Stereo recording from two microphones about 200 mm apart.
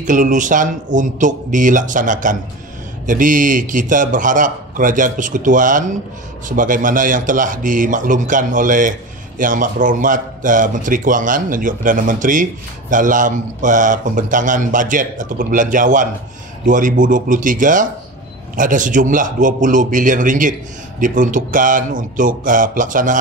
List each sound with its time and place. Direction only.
0.0 s a man's voice: 40° right (ahead or behind)